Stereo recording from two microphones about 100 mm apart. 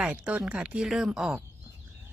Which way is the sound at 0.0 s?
10° right (ahead or behind).